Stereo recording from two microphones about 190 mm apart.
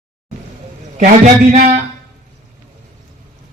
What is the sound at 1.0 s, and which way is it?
Speech, 40° right (ahead or behind).